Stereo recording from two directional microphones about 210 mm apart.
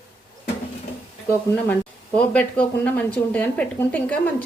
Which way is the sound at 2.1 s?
5° left (ahead or behind).